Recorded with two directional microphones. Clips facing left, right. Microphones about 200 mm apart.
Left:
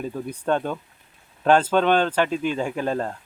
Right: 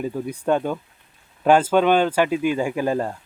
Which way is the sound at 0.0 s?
10° right (ahead or behind).